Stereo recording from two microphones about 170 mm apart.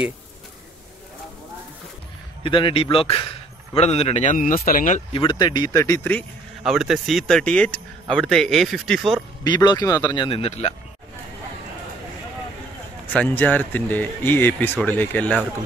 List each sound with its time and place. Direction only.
2.4 s a man's voice: 30° left (ahead or behind); by 5.0 s 50° left (ahead or behind)
5.1 s a man's voice: 30° left (ahead or behind); by 6.2 s 10° left (ahead or behind)
6.6 s speech: centre (ahead or behind)
9.4 s a man's voice: 25° left (ahead or behind)
13.1 s speech: 10° left (ahead or behind)